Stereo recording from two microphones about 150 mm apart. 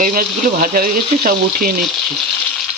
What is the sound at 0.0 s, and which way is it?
Speech, 65° right (ahead or behind).